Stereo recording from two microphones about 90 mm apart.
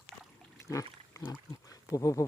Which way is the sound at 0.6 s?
35° left (ahead or behind).